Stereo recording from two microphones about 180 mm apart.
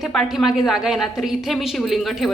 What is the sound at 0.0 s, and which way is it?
A woman's voice, centre (ahead or behind).